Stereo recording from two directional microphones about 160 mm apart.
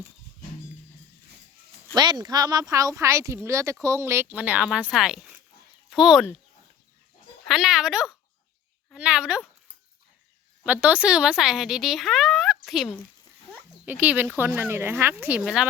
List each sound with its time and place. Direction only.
2.0 s speech: 25° right (ahead or behind); by 6.3 s centre (ahead or behind)
7.4 s speech: centre (ahead or behind)
10.6 s speech: 5° right (ahead or behind)